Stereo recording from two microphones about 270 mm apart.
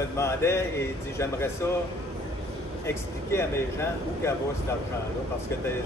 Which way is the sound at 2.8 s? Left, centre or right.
Centre.